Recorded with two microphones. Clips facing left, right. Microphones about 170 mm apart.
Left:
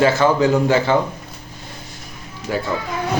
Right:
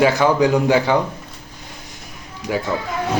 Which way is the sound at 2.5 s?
10° right (ahead or behind).